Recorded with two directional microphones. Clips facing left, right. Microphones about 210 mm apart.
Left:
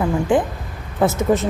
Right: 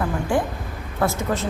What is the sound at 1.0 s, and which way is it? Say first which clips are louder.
Speech: left 6 dB; 20° left (ahead or behind).